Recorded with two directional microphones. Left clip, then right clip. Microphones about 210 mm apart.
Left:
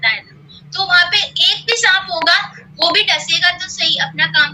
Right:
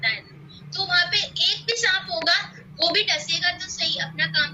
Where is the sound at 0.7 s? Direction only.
10° right (ahead or behind).